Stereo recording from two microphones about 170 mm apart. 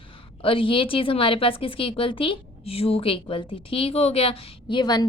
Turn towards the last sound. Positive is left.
turn(degrees=25)  # may be behind; listen again after turning